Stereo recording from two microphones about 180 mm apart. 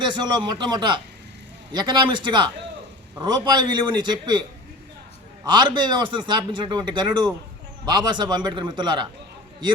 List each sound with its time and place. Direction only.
0.0 s a man's voice: 25° right (ahead or behind)
5.5 s a man's voice: 25° right (ahead or behind)